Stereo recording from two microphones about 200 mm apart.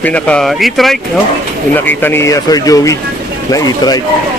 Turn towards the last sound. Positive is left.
turn(degrees=20)  # may be behind; listen again after turning